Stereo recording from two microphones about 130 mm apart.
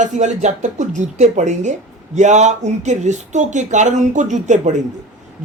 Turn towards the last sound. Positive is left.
turn(degrees=-65)  # may be behind; listen again after turning